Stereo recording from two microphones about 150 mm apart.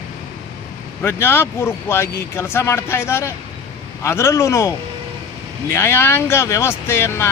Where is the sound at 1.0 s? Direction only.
15° left (ahead or behind).